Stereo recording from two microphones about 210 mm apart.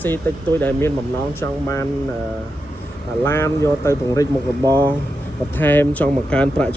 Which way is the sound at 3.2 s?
10° left (ahead or behind).